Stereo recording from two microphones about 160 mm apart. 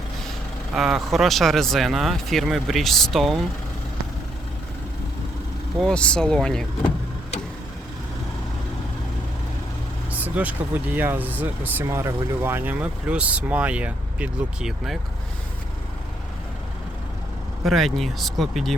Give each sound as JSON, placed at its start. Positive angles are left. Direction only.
{"t": 0.8, "sound": "speech", "side_deg": 0}
{"t": 5.8, "sound": "speech", "side_deg": 5}
{"t": 10.4, "sound": "speech", "side_deg": -10}
{"t": 17.7, "sound": "speech", "side_deg": 0}